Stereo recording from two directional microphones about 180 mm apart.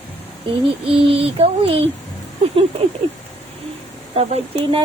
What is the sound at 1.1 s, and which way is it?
Speech, 30° right (ahead or behind).